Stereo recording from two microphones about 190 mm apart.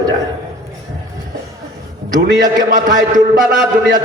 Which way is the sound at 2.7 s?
45° right (ahead or behind).